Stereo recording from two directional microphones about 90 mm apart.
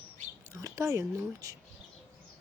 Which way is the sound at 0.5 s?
35° right (ahead or behind).